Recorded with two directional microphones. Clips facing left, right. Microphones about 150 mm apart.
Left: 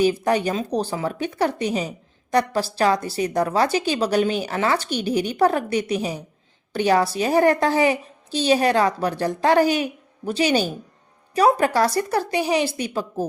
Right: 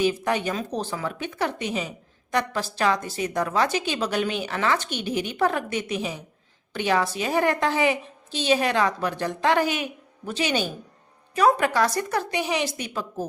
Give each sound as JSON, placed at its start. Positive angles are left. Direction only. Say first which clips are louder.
{"t": 0.0, "sound": "a woman's voice", "louder": "left 4 dB", "side_deg": 35}